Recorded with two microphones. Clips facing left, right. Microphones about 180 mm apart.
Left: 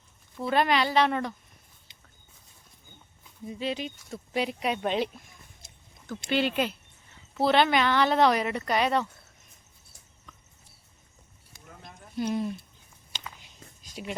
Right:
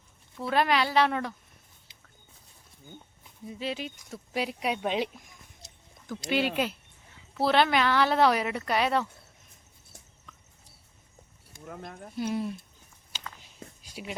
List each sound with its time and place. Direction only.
0.3 s speech: centre (ahead or behind)
3.4 s speech: 5° right (ahead or behind)
6.1 s speech: 15° right (ahead or behind)
7.3 s speech: centre (ahead or behind)
11.5 s a sound: 55° right (ahead or behind)
12.1 s speech: 5° right (ahead or behind)
13.8 s speech: 5° right (ahead or behind)